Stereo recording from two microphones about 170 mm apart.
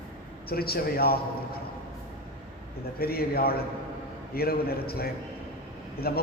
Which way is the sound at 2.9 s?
65° left (ahead or behind).